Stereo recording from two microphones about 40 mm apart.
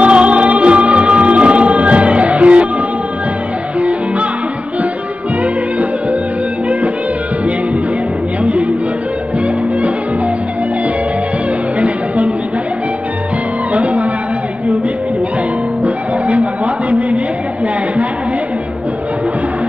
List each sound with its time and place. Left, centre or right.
0.0 s music: right
13.7 s music: right
15.8 s music: right